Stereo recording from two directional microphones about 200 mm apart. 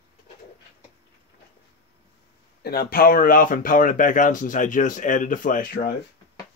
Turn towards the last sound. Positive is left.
turn(degrees=45)  # may be behind; listen again after turning